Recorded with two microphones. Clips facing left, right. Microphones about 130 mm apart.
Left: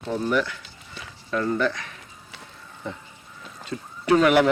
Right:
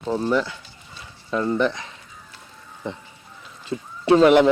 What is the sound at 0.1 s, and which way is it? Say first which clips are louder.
Speech: right 2 dB; 25° right (ahead or behind).